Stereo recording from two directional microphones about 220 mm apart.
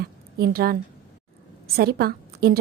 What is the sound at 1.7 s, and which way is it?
Speech, 45° right (ahead or behind).